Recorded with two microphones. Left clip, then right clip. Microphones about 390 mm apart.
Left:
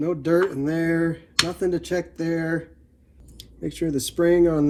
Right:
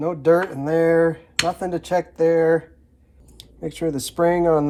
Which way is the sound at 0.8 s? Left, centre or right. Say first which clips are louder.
Right 9 dB; centre.